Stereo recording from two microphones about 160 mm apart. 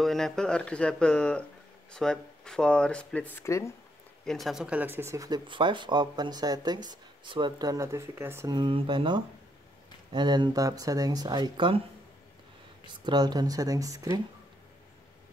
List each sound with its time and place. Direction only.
0.0 s speech: centre (ahead or behind); by 3.7 s 20° left (ahead or behind)
4.3 s speech: centre (ahead or behind); by 8.5 s 15° right (ahead or behind)
8.5 s speech: 30° right (ahead or behind)
12.8 s speech: 25° right (ahead or behind)